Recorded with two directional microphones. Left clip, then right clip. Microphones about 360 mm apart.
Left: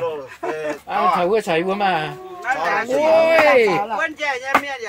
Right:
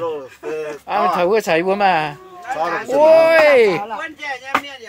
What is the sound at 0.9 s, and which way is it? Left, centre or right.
Speech, right.